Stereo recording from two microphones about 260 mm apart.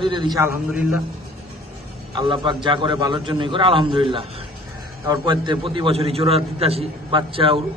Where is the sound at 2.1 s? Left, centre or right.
Centre.